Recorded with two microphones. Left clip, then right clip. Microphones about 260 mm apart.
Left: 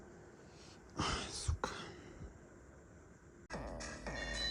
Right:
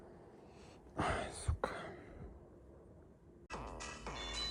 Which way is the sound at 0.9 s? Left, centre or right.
Centre.